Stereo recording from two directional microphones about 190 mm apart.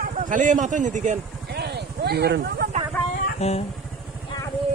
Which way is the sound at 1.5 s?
60° right (ahead or behind).